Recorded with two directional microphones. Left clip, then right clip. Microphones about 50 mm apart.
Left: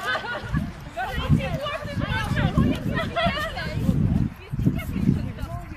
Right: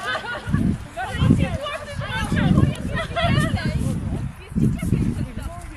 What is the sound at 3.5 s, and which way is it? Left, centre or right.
Hubbub, centre.